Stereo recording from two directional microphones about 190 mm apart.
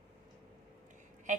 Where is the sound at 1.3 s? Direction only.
40° right (ahead or behind).